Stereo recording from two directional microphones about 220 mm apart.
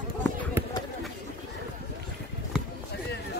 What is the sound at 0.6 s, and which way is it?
Run, 10° right (ahead or behind).